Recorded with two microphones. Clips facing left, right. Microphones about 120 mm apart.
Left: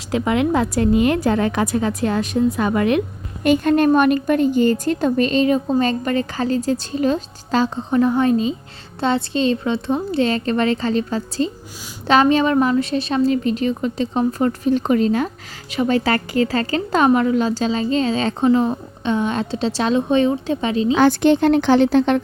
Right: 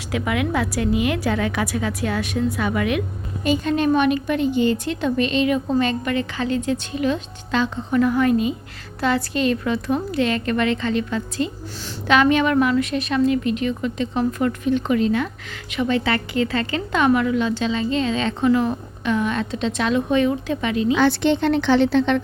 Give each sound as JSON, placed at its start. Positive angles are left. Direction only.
{"t": 0.1, "sound": "a woman's voice", "side_deg": 30}
{"t": 3.4, "sound": "a woman's voice", "side_deg": 55}
{"t": 21.0, "sound": "a woman's voice", "side_deg": 45}